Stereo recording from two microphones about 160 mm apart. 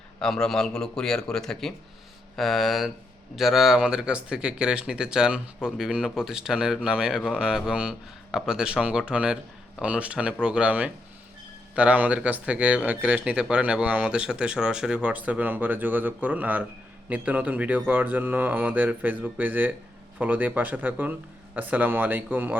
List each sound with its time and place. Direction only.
0.2 s speech: 5° left (ahead or behind); by 22.5 s 10° right (ahead or behind)